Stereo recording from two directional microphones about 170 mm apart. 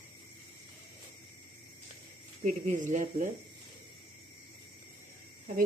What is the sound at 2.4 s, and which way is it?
Speech, 45° right (ahead or behind).